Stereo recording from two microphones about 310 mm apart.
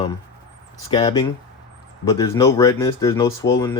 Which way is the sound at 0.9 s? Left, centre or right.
Centre.